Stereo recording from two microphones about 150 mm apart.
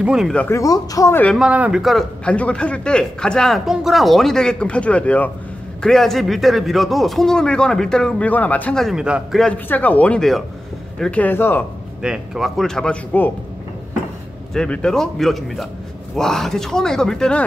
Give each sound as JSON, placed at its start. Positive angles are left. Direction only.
{"t": 0.0, "sound": "a man's voice", "side_deg": -5}
{"t": 0.3, "sound": "speech", "side_deg": 10}
{"t": 0.6, "sound": "speech", "side_deg": 20}
{"t": 1.4, "sound": "a man's voice", "side_deg": -5}
{"t": 9.4, "sound": "speech", "side_deg": 10}
{"t": 12.0, "sound": "a man's voice", "side_deg": -5}
{"t": 14.5, "sound": "a man's voice", "side_deg": 5}